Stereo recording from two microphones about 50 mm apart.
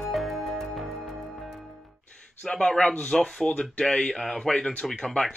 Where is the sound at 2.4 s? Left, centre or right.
Centre.